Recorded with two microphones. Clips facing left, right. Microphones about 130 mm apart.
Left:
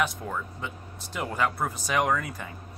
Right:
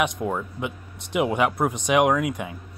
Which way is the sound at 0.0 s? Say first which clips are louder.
Right 5 dB; 20° right (ahead or behind).